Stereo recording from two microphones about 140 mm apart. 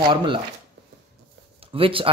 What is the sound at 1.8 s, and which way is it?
Speech, 40° right (ahead or behind).